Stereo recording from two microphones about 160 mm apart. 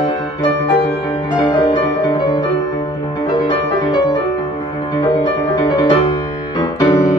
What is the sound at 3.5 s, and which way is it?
Music, 30° left (ahead or behind).